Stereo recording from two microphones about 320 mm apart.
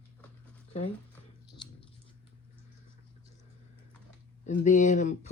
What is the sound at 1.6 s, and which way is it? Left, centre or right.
Chewing, centre.